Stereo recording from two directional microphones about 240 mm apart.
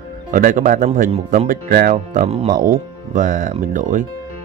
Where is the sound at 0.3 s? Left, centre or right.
Right.